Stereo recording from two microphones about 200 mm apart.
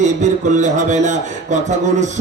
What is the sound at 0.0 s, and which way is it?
Speech, 35° right (ahead or behind).